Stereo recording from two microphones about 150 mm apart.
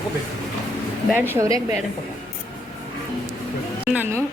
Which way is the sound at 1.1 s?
15° right (ahead or behind).